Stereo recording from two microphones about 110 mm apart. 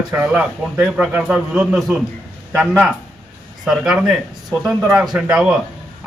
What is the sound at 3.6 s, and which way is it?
A man's voice, 5° right (ahead or behind).